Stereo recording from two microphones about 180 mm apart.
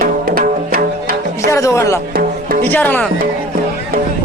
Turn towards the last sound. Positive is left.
turn(degrees=10)  # may be behind; listen again after turning